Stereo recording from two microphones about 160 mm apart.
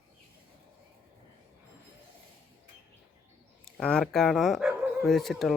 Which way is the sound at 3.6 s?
5° left (ahead or behind).